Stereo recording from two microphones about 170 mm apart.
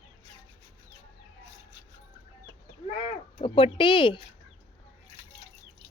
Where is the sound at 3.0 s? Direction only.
35° left (ahead or behind).